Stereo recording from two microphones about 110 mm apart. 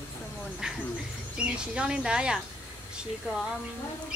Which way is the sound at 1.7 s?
10° right (ahead or behind).